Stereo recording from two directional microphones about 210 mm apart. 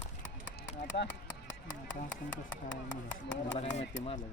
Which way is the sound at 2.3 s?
60° left (ahead or behind).